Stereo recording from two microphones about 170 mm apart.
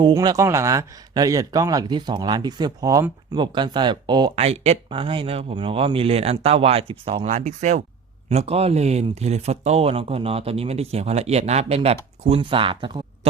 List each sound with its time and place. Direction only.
0.1 s speech: 20° right (ahead or behind)
4.4 s speech: 40° right (ahead or behind)